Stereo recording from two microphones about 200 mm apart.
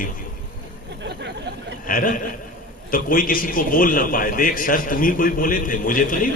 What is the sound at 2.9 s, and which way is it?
A man's voice, 45° left (ahead or behind).